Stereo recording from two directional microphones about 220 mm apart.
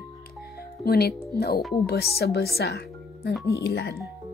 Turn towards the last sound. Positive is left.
turn(degrees=50)  # may be behind; listen again after turning